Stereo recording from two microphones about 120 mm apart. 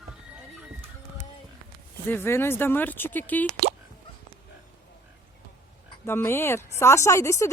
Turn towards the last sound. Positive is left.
turn(degrees=25)  # may be behind; listen again after turning